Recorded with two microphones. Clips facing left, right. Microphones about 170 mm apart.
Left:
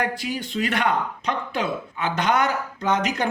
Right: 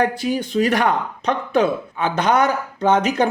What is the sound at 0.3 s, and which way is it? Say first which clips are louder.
Speech: right 7 dB; 45° right (ahead or behind).